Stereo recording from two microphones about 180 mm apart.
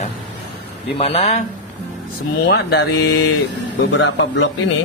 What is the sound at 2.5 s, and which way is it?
Mantra, 65° left (ahead or behind).